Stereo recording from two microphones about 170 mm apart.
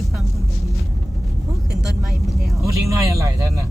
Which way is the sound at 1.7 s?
Centre (ahead or behind).